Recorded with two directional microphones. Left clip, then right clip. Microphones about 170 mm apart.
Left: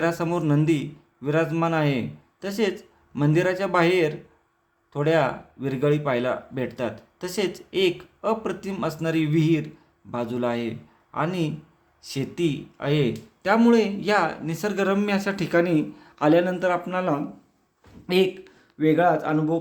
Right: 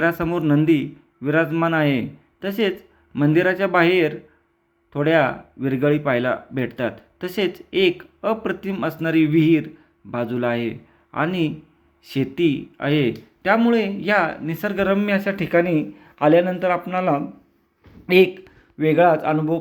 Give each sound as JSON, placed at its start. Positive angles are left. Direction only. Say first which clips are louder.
{"t": 0.0, "sound": "a man's voice", "louder": "right 4 dB", "side_deg": -10}